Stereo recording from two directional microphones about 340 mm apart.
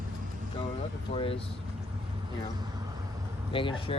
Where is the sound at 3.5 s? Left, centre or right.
Centre.